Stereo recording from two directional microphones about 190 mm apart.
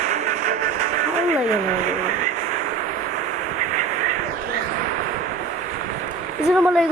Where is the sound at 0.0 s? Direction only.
40° right (ahead or behind).